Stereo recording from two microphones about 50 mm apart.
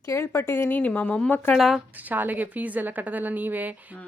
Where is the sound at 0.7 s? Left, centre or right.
Left.